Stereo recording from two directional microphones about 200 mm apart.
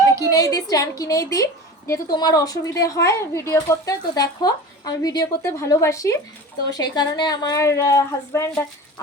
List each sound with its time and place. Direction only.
0.3 s a woman's voice: 15° left (ahead or behind)